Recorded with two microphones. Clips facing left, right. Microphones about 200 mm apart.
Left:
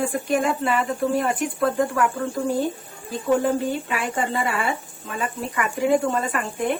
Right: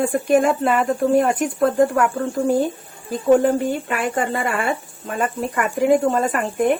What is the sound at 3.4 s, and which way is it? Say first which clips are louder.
Speech: right 4 dB; 50° right (ahead or behind).